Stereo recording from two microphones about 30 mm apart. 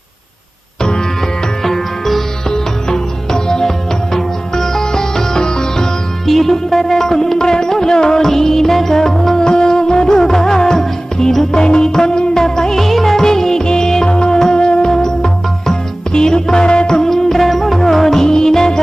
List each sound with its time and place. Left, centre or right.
0.8 s music: left
1.6 s music: centre
2.5 s music: left
6.2 s music: centre
9.4 s music: left
11.5 s music: left
12.8 s music: centre; by 14.8 s left
14.8 s music: centre